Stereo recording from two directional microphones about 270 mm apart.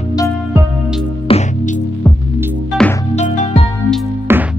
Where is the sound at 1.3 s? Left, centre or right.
Left.